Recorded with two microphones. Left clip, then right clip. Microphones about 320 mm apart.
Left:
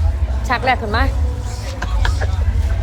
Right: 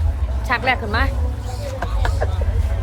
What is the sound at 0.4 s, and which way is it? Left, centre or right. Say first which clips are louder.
Speech: left 2 dB; centre.